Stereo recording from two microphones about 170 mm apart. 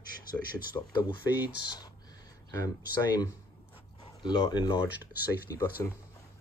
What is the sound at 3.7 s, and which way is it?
Zipper, 25° left (ahead or behind).